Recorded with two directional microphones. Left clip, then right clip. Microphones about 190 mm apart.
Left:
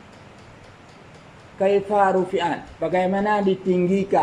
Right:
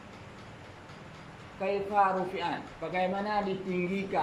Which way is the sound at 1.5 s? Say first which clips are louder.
Left 9 dB; 40° left (ahead or behind).